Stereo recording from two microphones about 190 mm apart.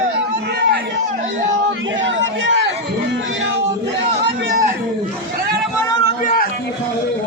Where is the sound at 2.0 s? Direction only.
75° right (ahead or behind).